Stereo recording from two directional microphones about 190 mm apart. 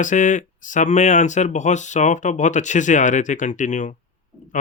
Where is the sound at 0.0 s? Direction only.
40° left (ahead or behind).